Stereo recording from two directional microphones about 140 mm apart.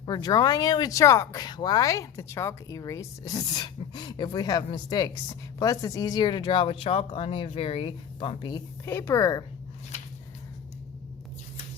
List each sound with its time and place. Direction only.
0.0 s speech: 30° left (ahead or behind)
8.8 s speech: 20° left (ahead or behind)